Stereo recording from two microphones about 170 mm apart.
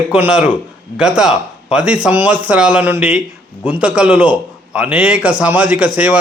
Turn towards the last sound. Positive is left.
turn(degrees=-5)  # may be behind; listen again after turning